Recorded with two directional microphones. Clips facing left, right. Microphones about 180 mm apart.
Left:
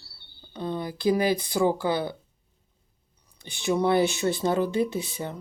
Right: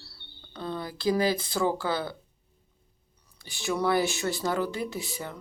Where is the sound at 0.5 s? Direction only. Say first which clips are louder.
Left 4 dB; 20° left (ahead or behind).